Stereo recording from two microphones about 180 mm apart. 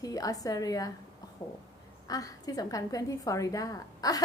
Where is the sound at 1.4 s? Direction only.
30° left (ahead or behind).